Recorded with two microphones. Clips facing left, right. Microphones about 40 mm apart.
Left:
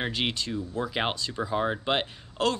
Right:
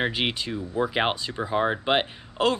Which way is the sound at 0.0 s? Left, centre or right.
Centre.